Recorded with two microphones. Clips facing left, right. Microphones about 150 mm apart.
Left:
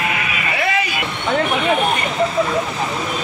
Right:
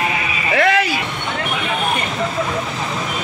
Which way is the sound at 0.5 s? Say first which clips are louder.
Right 6 dB; 90° right.